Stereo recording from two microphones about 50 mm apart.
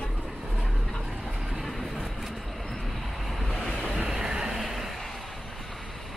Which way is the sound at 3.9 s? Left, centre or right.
Centre.